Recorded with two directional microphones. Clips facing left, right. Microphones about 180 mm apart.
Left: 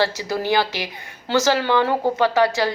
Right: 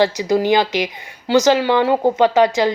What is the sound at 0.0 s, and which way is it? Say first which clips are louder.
A woman's voice: right 6 dB; 15° right (ahead or behind).